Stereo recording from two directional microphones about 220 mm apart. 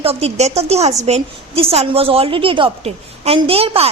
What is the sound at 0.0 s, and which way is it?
A woman's voice, 30° right (ahead or behind).